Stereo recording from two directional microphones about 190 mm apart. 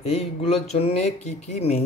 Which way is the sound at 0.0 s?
35° left (ahead or behind).